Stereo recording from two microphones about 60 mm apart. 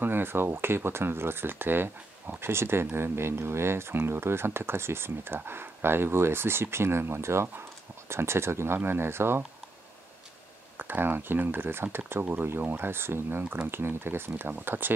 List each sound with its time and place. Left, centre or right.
0.0 s speech: right
10.8 s speech: right